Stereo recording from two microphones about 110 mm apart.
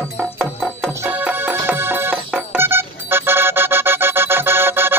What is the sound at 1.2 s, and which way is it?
Music, 15° right (ahead or behind).